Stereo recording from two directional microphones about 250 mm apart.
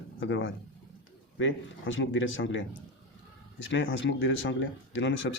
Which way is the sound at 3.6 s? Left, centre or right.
Left.